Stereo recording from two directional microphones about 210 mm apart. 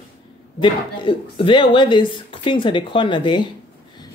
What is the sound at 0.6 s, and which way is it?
Speech, 25° left (ahead or behind).